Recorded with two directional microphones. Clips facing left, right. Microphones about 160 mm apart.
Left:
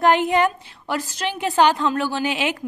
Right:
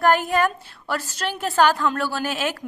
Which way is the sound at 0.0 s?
20° left (ahead or behind).